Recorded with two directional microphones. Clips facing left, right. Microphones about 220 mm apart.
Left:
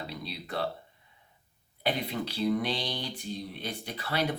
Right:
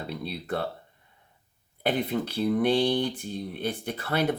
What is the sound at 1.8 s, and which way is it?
Speech, 50° right (ahead or behind).